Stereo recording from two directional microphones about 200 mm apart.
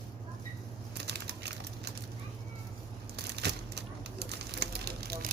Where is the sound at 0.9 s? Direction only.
55° right (ahead or behind).